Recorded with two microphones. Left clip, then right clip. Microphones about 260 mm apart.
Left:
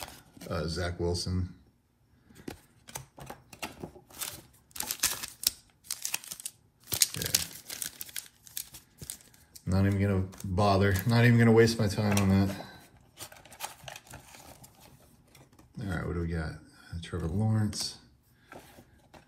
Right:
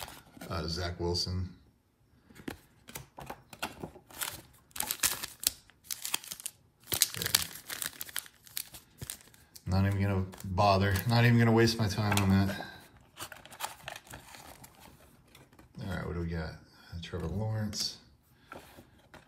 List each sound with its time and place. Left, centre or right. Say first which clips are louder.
0.0 s speech: left 1 dB; centre
3.2 s a sound: right 4 dB; centre
4.8 s typewriter: left 1 dB; centre
7.0 s crumpling: left 2 dB; centre
7.7 s crumpling: right 2 dB; right
9.7 s a sound: left 3 dB; centre
10.5 s speech: even; centre
12.5 s a sound: right 2 dB; centre
17.7 s speech: right 1 dB; centre